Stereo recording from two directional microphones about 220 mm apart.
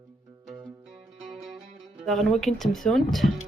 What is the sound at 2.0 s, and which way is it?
Speech, centre (ahead or behind).